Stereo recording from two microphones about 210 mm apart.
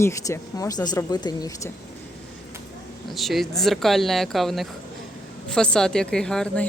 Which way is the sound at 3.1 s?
Centre (ahead or behind).